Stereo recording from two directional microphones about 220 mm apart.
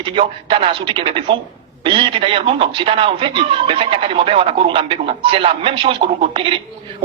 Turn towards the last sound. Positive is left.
turn(degrees=-25)  # may be behind; listen again after turning